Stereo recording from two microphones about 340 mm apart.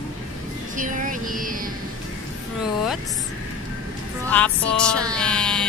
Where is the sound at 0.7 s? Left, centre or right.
Right.